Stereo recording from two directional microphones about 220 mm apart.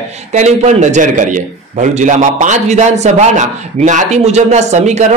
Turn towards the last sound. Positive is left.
turn(degrees=-30)  # may be behind; listen again after turning